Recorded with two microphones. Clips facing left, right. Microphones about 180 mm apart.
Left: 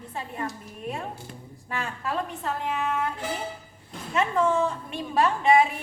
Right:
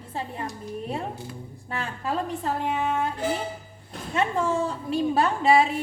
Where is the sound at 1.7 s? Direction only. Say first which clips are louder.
Right 1 dB; 30° right (ahead or behind).